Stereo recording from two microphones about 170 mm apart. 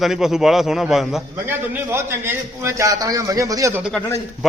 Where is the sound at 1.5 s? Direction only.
15° right (ahead or behind).